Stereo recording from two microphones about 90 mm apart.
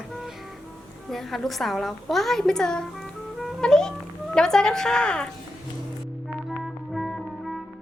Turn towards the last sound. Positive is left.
turn(degrees=0)  # may be behind; listen again after turning